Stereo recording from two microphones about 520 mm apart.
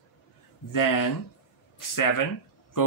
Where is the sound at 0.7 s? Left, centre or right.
Left.